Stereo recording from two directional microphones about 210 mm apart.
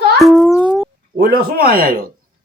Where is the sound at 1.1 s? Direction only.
45° right (ahead or behind).